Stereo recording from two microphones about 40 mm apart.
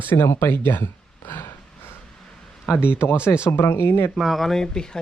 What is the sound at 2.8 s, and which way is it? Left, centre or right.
Speech, left.